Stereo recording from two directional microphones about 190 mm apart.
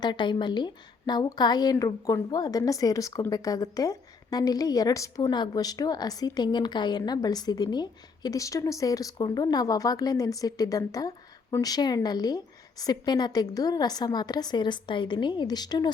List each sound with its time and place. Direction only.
0.0 s a woman's voice: 25° left (ahead or behind)